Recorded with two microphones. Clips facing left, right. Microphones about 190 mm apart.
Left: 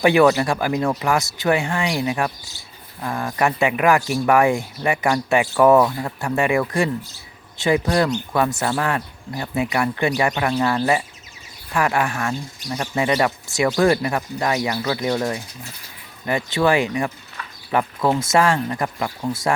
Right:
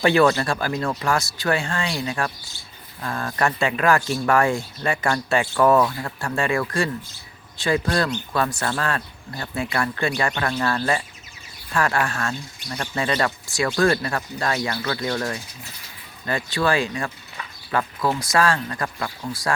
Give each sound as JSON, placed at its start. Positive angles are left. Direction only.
{"t": 0.0, "sound": "speech", "side_deg": 15}